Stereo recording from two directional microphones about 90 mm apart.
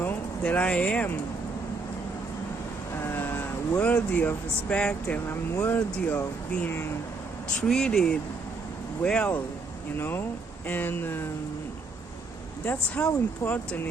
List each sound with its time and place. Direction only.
0.0 s speech: 20° left (ahead or behind)
3.0 s speech: 25° left (ahead or behind)
5.3 s speech: 25° left (ahead or behind)
7.6 s speech: 5° left (ahead or behind)
10.0 s speech: 25° left (ahead or behind)
12.6 s speech: 15° left (ahead or behind)
13.4 s speech: 30° left (ahead or behind)